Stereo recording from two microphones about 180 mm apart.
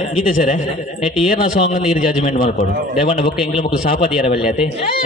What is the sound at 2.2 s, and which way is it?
Speech, 45° left (ahead or behind).